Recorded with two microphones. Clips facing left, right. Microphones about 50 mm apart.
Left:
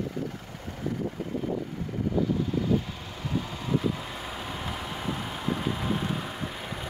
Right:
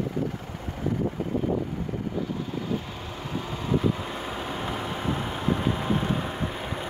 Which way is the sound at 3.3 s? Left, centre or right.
Right.